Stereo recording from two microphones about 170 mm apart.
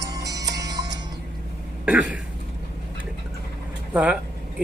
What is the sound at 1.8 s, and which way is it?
Throat clearing, 5° right (ahead or behind).